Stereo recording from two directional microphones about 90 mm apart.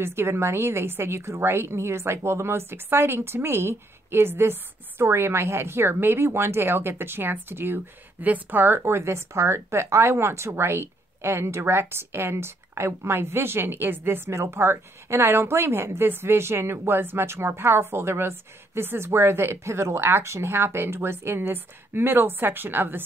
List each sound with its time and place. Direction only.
0.0 s a woman's voice: 30° right (ahead or behind)